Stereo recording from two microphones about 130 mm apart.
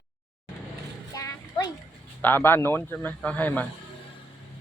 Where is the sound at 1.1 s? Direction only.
25° left (ahead or behind).